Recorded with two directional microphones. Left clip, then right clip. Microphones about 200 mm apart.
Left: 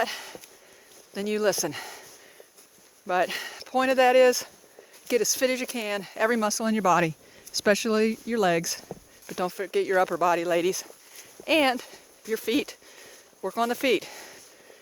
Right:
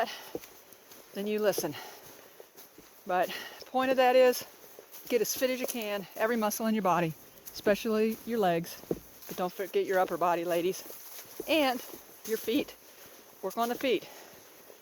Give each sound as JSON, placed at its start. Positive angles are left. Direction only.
{"t": 0.0, "sound": "speech", "side_deg": 45}
{"t": 3.1, "sound": "speech", "side_deg": 45}